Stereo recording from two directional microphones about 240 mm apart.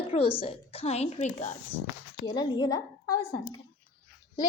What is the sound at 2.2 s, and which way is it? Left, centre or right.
Speech, centre.